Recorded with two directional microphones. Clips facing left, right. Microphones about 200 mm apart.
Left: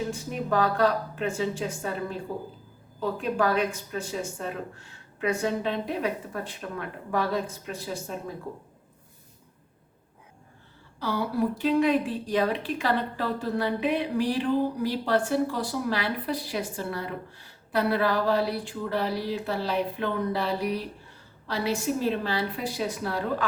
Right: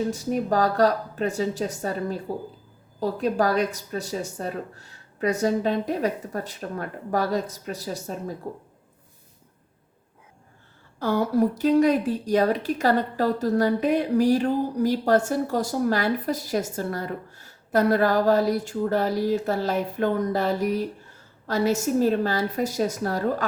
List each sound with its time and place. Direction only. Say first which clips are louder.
0.1 s a woman's voice: right 4 dB; 40° right (ahead or behind)
11.0 s a woman's voice: right 5 dB; 45° right (ahead or behind)